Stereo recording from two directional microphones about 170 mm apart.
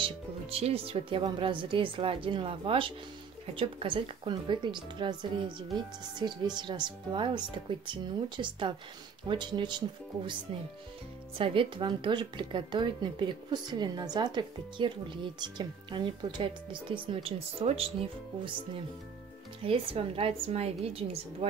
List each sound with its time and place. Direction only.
0.0 s speech: 35° right (ahead or behind)
11.3 s speech: 30° right (ahead or behind)
19.6 s speech: 35° right (ahead or behind)